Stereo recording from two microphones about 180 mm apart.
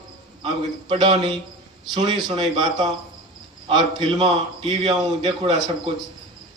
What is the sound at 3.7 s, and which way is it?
A man's voice, 25° right (ahead or behind).